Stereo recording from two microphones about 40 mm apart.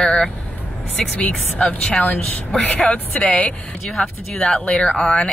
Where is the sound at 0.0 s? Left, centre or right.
Centre.